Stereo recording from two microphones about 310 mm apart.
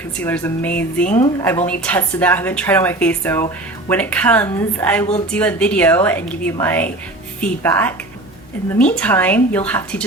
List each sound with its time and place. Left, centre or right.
0.2 s a woman's voice: centre